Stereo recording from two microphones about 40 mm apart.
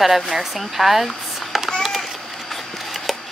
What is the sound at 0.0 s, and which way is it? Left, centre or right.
Speech, centre.